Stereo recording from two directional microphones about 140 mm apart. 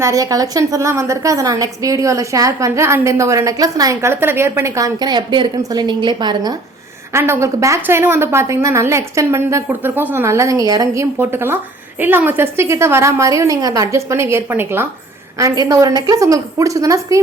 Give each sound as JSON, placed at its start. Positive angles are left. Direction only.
{"t": 0.0, "sound": "a woman's voice", "side_deg": -25}
{"t": 7.1, "sound": "a woman's voice", "side_deg": -20}